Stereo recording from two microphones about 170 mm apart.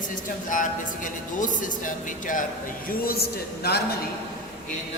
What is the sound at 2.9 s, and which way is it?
Speech, 65° left (ahead or behind).